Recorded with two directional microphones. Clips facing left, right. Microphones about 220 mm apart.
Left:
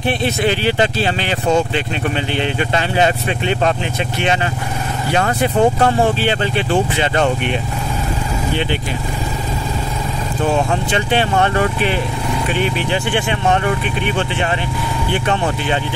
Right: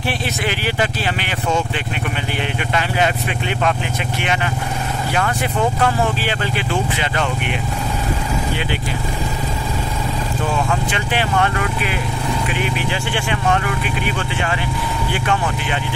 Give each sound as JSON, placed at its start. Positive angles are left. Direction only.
{"t": 0.2, "sound": "speech", "side_deg": 25}
{"t": 2.7, "sound": "speech", "side_deg": 30}
{"t": 5.1, "sound": "speech", "side_deg": 30}
{"t": 10.7, "sound": "speech", "side_deg": 30}